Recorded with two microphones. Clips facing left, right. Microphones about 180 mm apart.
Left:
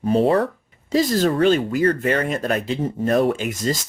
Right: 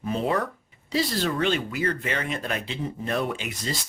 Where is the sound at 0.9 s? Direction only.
45° left (ahead or behind).